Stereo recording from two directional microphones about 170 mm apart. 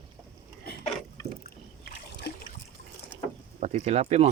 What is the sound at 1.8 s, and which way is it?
Splash, 70° left (ahead or behind).